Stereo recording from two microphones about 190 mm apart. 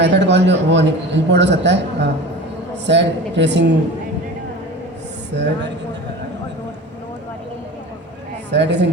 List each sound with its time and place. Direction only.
0.0 s a man's voice: 65° right (ahead or behind)
5.3 s a man's voice: 65° right (ahead or behind)
8.4 s a woman's voice: 65° right (ahead or behind)